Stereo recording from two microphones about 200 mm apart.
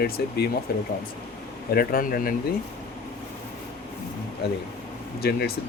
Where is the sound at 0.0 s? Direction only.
50° left (ahead or behind).